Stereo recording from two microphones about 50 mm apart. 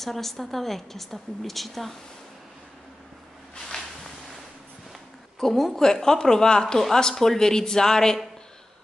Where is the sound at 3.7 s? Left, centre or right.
Centre.